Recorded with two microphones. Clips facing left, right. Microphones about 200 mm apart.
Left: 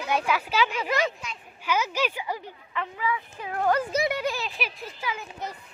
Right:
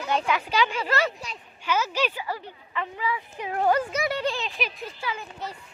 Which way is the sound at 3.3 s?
20° right (ahead or behind).